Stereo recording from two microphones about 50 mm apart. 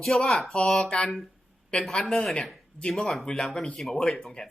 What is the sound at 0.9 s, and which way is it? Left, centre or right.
Speech, left.